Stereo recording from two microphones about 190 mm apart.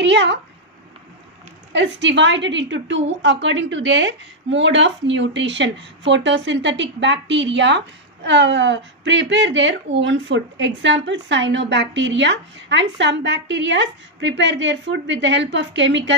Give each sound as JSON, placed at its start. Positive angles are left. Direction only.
{"t": 0.0, "sound": "a woman's voice", "side_deg": -65}
{"t": 1.7, "sound": "a woman's voice", "side_deg": -70}